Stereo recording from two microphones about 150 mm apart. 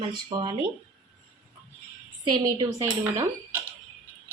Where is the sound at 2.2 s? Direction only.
25° right (ahead or behind).